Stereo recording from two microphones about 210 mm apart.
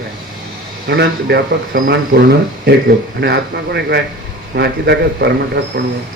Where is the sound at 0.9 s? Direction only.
55° right (ahead or behind).